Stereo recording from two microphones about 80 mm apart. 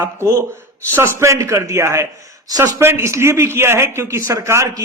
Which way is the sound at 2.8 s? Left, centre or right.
Right.